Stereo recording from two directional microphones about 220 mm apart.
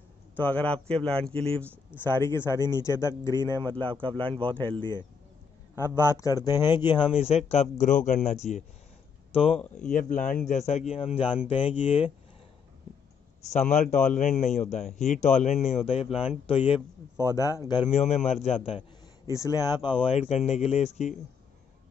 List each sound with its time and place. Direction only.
0.4 s speech: 5° left (ahead or behind)
3.9 s speech: 25° right (ahead or behind)
4.6 s speech: 10° left (ahead or behind)
6.1 s speech: 15° left (ahead or behind)
9.8 s speech: 35° left (ahead or behind)
13.5 s speech: 35° left (ahead or behind)
17.2 s speech: 15° left (ahead or behind); by 18.6 s 30° left (ahead or behind)
19.3 s speech: 15° left (ahead or behind); by 21.2 s 30° left (ahead or behind)